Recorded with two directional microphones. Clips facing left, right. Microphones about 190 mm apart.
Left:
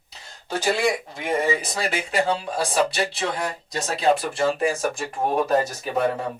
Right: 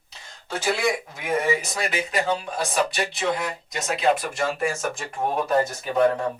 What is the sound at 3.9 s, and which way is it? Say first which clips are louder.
Speech: left 1 dB; 35° left (ahead or behind).